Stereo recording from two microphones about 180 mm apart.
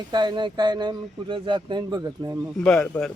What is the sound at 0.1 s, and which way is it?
Speech, 25° right (ahead or behind).